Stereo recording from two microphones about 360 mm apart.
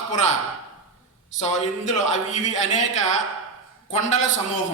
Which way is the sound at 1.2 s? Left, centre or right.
Centre.